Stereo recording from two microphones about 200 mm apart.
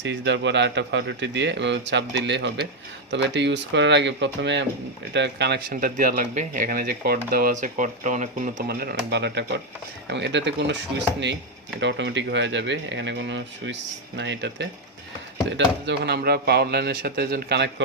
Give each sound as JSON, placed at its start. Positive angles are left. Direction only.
{"t": 0.0, "sound": "speech", "side_deg": -65}
{"t": 11.8, "sound": "speech", "side_deg": -60}